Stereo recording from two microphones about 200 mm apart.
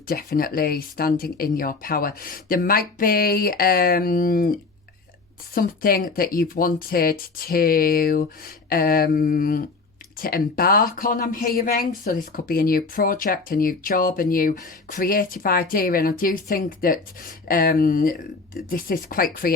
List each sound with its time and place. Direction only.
0.1 s speech: 50° left (ahead or behind)
5.5 s speech: 45° left (ahead or behind)